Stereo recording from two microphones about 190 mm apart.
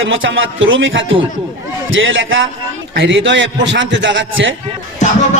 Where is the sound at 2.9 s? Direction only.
75° right (ahead or behind).